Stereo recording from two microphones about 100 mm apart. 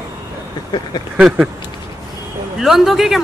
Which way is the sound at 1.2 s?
5° right (ahead or behind).